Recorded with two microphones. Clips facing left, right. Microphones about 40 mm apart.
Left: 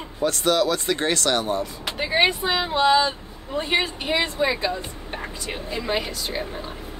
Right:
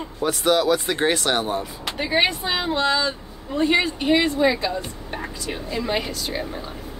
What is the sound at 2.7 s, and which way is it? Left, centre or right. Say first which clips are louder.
A woman's voice: left 7 dB; centre.